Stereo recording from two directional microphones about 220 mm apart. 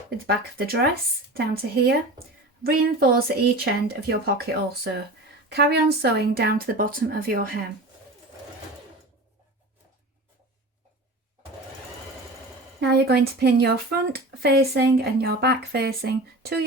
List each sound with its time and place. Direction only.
0.3 s speech: 45° right (ahead or behind)
2.6 s speech: 45° right (ahead or behind)
12.8 s speech: 50° right (ahead or behind)